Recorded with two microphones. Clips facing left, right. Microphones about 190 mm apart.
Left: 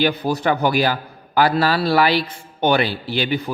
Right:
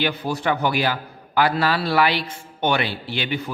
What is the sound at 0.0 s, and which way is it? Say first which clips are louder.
A man's voice: left 4 dB; 35° left (ahead or behind).